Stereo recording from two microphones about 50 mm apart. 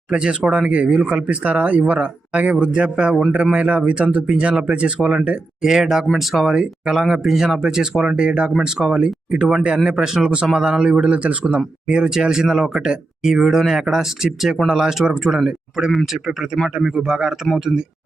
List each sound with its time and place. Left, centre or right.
0.1 s speech: centre
5.6 s speech: centre
16.8 s speech: centre